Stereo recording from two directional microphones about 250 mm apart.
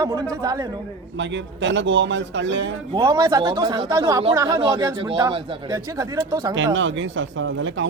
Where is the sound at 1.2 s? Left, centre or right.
Right.